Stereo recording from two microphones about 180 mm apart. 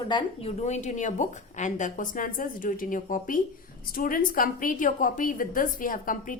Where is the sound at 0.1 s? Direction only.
30° left (ahead or behind).